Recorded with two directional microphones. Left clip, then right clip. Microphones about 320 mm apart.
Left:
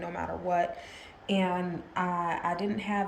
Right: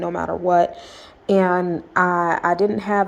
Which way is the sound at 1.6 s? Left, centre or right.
Right.